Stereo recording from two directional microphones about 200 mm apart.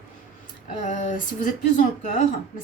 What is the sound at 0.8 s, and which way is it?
Speech, 35° left (ahead or behind).